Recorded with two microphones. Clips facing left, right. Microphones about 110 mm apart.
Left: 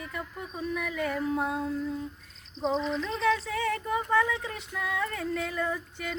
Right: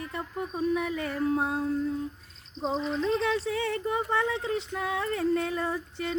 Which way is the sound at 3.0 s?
35° right (ahead or behind).